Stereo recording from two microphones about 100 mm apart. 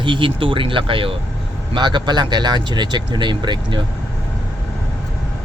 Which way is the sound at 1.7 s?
50° right (ahead or behind).